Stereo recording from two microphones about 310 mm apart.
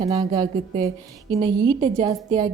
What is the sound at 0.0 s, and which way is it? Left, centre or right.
Speech, centre.